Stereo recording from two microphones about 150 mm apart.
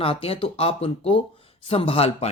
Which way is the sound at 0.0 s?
40° left (ahead or behind).